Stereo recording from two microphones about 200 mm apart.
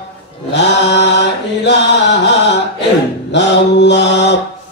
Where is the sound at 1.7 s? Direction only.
60° left (ahead or behind).